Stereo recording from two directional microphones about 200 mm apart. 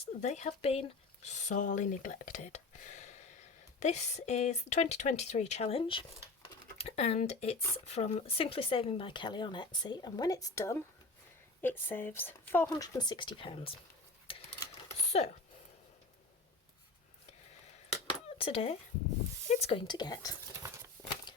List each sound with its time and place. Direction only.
0.0 s speech: 35° left (ahead or behind)
14.3 s sewing machine: 25° left (ahead or behind)
18.3 s speech: 30° left (ahead or behind)
20.5 s horse: 15° right (ahead or behind)